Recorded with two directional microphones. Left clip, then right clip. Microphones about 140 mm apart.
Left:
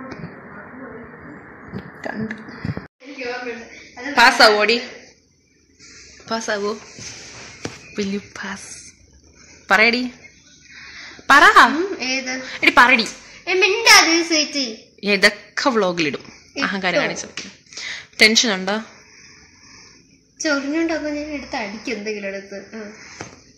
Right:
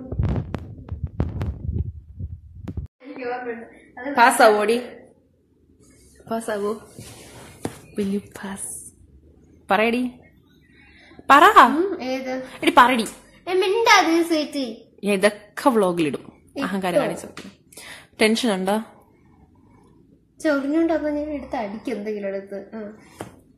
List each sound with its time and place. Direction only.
4.1 s a woman's voice: 15° right (ahead or behind)
6.2 s speech: centre (ahead or behind)
7.9 s speech: 15° right (ahead or behind)
8.3 s a woman's voice: 25° right (ahead or behind)
9.7 s a woman's voice: 15° right (ahead or behind)
17.6 s a sound: 25° right (ahead or behind)
20.4 s a woman's voice: 20° right (ahead or behind)